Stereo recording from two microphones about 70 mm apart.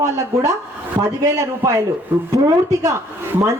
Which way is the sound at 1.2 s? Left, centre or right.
Right.